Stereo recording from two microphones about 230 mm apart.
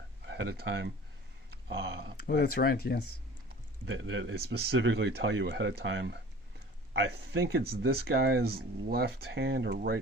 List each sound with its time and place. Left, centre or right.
0.3 s speech: right
2.2 s speech: left
3.8 s speech: right